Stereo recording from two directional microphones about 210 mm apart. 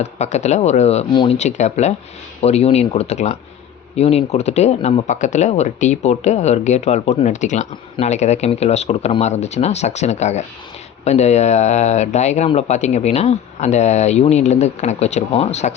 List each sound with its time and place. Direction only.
0.0 s speech: 35° left (ahead or behind)